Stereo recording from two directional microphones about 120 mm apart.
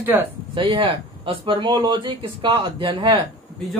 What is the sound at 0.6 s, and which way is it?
Speech, 50° right (ahead or behind).